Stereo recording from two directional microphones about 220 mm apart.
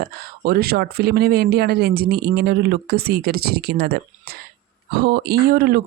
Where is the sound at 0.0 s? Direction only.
45° right (ahead or behind).